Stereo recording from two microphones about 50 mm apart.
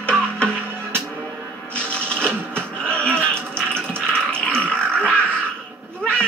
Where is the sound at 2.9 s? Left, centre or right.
Left.